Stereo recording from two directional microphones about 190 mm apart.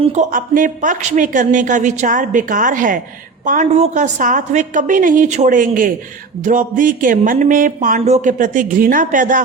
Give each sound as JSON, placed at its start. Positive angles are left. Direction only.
{"t": 0.0, "sound": "speech", "side_deg": -35}